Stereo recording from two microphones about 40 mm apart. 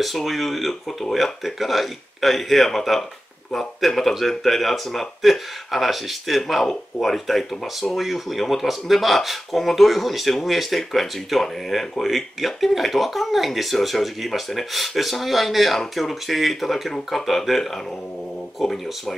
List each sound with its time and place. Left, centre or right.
0.0 s speech: centre